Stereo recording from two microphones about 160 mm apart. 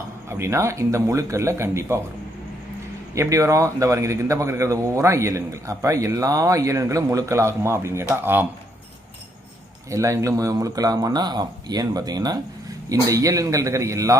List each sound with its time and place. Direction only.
0.3 s speech: 15° right (ahead or behind)
3.2 s a man's voice: 20° right (ahead or behind)
9.9 s a man's voice: 20° right (ahead or behind)